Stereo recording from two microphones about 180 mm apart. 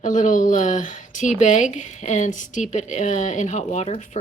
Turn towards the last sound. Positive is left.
turn(degrees=40)  # may be behind; listen again after turning